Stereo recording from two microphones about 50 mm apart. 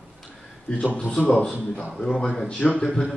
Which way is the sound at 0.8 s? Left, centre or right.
Centre.